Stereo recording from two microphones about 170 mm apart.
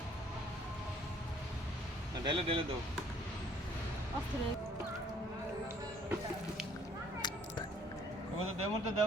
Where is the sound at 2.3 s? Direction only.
30° right (ahead or behind).